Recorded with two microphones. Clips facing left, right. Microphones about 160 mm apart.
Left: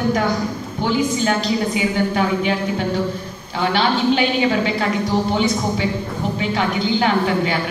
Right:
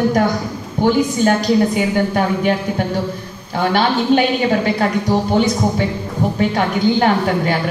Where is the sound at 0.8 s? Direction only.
50° right (ahead or behind).